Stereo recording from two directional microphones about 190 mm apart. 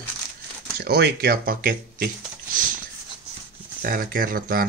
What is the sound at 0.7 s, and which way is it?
Speech, 55° right (ahead or behind).